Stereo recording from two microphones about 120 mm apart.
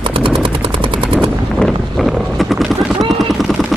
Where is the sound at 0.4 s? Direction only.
45° right (ahead or behind).